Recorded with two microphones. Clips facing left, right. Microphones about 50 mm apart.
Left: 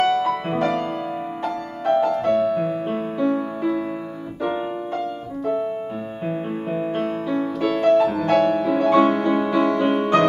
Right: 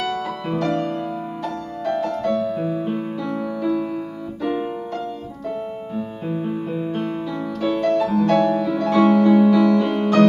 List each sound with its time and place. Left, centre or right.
0.0 s music: left
2.0 s music: left
6.2 s music: left